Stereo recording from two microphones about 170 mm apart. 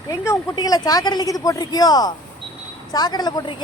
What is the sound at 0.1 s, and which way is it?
A woman's voice, 20° left (ahead or behind).